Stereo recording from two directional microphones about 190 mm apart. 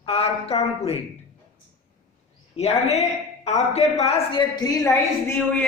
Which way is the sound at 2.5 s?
35° left (ahead or behind).